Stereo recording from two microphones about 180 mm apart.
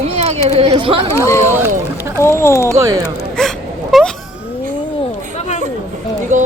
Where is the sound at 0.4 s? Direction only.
35° right (ahead or behind).